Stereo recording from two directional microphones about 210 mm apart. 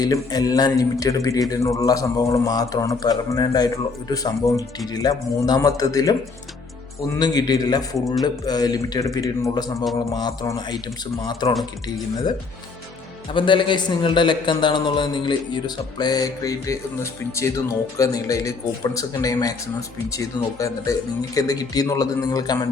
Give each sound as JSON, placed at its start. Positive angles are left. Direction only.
{"t": 0.0, "sound": "speech", "side_deg": 20}
{"t": 7.2, "sound": "a man's voice", "side_deg": 20}
{"t": 13.3, "sound": "a man's voice", "side_deg": 25}